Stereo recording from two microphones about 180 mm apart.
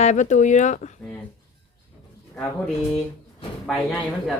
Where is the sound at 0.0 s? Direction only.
40° left (ahead or behind).